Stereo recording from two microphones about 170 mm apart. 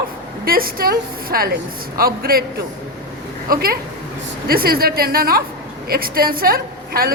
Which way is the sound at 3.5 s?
60° right (ahead or behind).